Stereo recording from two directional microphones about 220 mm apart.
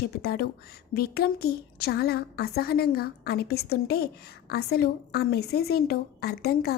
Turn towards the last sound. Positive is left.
turn(degrees=45)  # may be behind; listen again after turning